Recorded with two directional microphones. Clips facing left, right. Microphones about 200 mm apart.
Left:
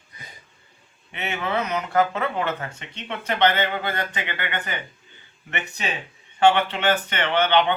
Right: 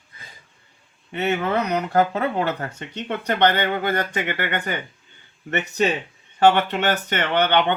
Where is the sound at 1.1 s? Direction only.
40° right (ahead or behind).